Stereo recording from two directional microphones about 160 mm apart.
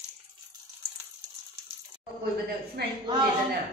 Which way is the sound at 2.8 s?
90° right.